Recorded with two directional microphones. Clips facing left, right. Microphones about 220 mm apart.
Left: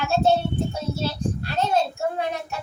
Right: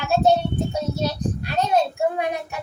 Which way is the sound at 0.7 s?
15° right (ahead or behind).